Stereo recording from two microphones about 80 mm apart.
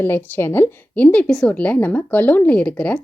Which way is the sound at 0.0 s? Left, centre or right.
Left.